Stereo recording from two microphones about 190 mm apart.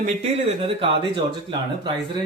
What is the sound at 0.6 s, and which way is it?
Speech, 30° right (ahead or behind).